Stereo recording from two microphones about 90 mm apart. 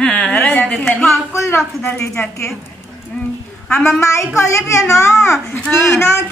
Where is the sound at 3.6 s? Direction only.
15° left (ahead or behind).